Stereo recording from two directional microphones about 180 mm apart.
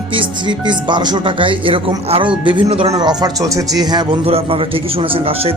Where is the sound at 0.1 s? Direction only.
25° right (ahead or behind).